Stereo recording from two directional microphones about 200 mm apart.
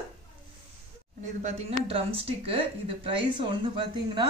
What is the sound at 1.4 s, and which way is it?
Speech, 30° right (ahead or behind).